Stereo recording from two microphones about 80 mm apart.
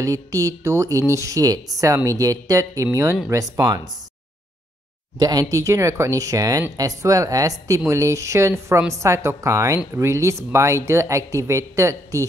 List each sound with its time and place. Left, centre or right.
0.0 s speech: right
5.2 s speech: right